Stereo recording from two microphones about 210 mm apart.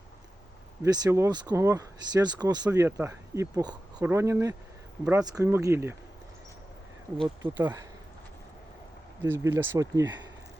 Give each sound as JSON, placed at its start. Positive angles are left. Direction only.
{"t": 0.8, "sound": "speech", "side_deg": -20}
{"t": 7.5, "sound": "speech", "side_deg": -10}
{"t": 9.2, "sound": "speech", "side_deg": -10}